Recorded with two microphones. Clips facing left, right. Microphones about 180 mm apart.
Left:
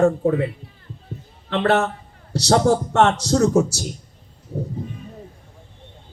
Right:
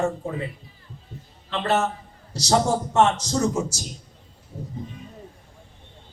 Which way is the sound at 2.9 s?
65° left (ahead or behind).